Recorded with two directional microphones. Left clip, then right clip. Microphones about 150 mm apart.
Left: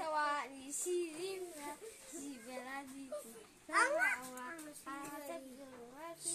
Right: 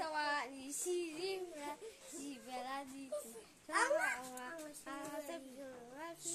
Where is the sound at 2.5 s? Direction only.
10° right (ahead or behind).